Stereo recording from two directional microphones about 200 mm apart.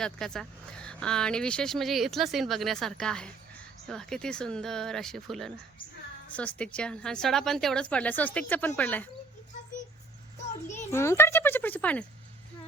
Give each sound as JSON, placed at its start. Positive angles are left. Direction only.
{"t": 0.0, "sound": "speech", "side_deg": 5}
{"t": 10.9, "sound": "speech", "side_deg": 15}